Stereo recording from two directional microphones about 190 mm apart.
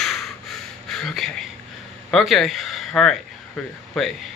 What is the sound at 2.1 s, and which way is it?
Speech, centre (ahead or behind).